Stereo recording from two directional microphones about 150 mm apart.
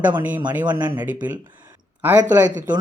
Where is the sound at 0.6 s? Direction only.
30° right (ahead or behind).